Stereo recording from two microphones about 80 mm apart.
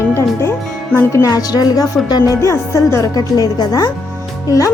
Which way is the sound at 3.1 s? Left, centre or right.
Left.